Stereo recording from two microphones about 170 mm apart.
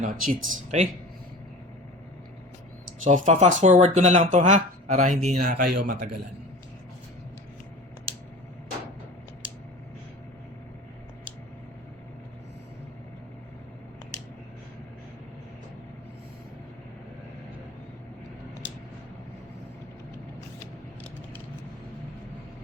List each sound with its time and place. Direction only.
0.0 s speech: 45° right (ahead or behind)
3.0 s speech: 45° right (ahead or behind); by 6.1 s 60° right (ahead or behind)